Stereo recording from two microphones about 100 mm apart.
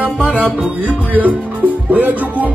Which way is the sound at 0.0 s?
10° right (ahead or behind).